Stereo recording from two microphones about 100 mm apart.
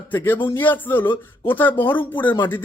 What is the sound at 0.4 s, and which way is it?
Speech, 20° left (ahead or behind).